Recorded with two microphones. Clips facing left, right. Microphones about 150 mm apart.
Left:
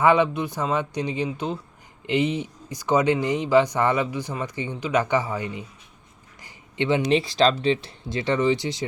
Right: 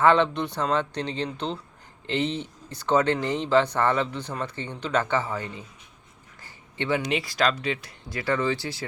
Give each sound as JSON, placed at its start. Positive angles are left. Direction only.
{"t": 0.0, "sound": "speech", "side_deg": 10}
{"t": 6.4, "sound": "a sound", "side_deg": 20}
{"t": 7.0, "sound": "speech", "side_deg": 30}